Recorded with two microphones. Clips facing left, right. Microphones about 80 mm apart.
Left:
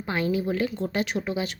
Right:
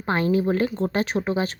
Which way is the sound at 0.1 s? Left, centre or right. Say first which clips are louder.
Right 5 dB; right.